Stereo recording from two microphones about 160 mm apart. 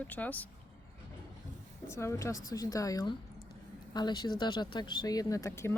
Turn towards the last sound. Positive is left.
turn(degrees=15)  # may be behind; listen again after turning